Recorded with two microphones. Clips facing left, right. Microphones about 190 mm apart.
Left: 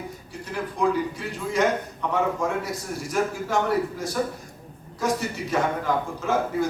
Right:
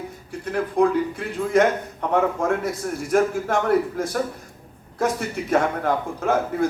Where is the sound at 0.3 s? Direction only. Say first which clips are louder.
Right 7 dB; 55° right (ahead or behind).